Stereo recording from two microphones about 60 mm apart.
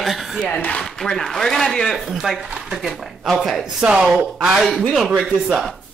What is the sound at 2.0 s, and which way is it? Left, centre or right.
Speech, centre.